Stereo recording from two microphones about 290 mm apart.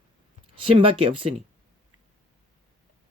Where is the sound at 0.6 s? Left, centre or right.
Centre.